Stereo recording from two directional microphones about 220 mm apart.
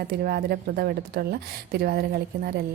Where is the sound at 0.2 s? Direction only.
45° right (ahead or behind).